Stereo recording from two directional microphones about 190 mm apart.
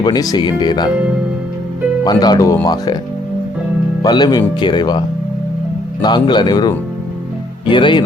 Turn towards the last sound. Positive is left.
turn(degrees=25)  # may be behind; listen again after turning